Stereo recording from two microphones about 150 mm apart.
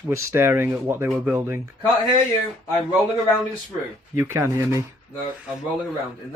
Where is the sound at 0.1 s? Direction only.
15° right (ahead or behind).